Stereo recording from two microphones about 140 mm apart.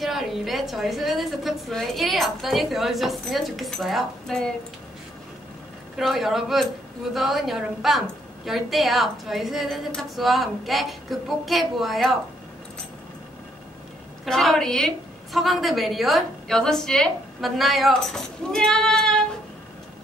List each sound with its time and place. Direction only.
0.0 s a woman's voice: centre (ahead or behind)
5.9 s a woman's voice: centre (ahead or behind)
14.2 s a woman's voice: centre (ahead or behind)